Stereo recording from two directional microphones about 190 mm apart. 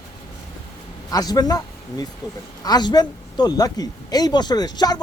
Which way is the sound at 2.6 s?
20° left (ahead or behind).